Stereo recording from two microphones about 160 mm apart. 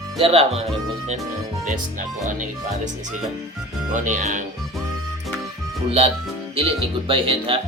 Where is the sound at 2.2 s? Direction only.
50° right (ahead or behind).